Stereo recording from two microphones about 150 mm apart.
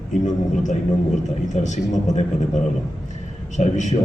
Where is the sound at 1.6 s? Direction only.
55° left (ahead or behind).